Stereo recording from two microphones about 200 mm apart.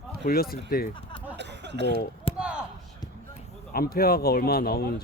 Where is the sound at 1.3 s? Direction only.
60° right (ahead or behind).